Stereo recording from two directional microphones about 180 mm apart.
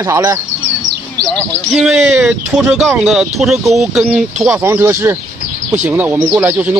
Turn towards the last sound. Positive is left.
turn(degrees=-5)  # may be behind; listen again after turning